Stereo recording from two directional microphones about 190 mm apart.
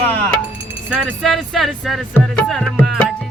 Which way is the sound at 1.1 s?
Centre (ahead or behind).